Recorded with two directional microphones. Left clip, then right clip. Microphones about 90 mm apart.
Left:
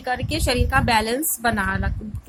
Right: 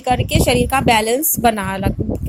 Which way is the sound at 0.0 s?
35° right (ahead or behind).